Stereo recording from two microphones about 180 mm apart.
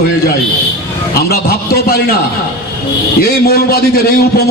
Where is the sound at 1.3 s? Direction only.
60° left (ahead or behind).